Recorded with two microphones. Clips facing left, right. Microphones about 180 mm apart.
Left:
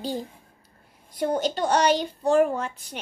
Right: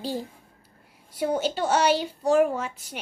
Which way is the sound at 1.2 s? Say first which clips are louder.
Left 1 dB; 10° right (ahead or behind).